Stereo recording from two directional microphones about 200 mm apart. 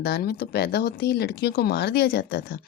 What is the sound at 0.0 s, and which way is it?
Speech, 50° left (ahead or behind).